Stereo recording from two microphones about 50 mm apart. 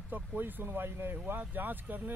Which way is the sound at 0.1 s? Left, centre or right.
Right.